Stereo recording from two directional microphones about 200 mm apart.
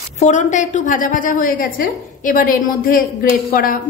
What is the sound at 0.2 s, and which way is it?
A woman's voice, 35° left (ahead or behind).